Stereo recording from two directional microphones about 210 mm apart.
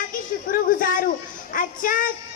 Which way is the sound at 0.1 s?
40° left (ahead or behind).